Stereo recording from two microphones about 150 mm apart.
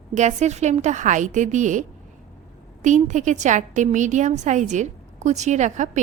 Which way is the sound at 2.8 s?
55° right (ahead or behind).